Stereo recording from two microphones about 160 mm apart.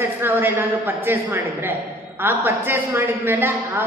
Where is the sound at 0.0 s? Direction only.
15° right (ahead or behind).